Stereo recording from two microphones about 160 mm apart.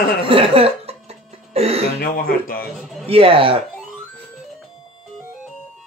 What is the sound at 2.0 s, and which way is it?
Speech, 65° left (ahead or behind).